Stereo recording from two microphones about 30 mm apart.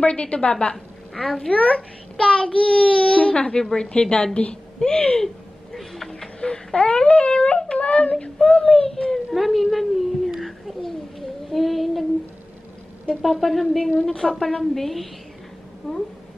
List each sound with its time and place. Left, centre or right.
0.0 s a woman's voice: left
1.1 s speech: centre
1.5 s a child's voice: left
4.7 s speech: left
5.2 s a sound: centre
6.4 s a child's voice: left
7.4 s yodeling: left
7.8 s yodeling: left
8.6 s speech: centre
9.3 s a woman's voice: centre
10.4 s child singing: centre
13.2 s a woman's voice: centre
14.6 s a woman's voice: centre